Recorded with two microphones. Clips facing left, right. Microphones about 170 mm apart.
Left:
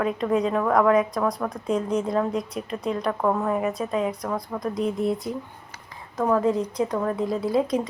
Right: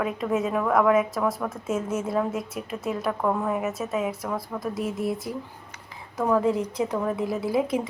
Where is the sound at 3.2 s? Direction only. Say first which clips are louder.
Left 2 dB; 5° left (ahead or behind).